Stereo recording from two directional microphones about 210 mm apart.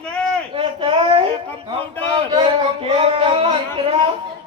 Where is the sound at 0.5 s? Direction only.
25° right (ahead or behind).